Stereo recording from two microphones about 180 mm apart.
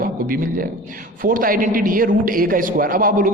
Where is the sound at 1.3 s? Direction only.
50° right (ahead or behind).